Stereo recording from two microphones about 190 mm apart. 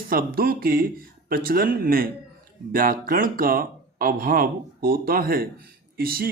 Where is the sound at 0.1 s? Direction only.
50° right (ahead or behind).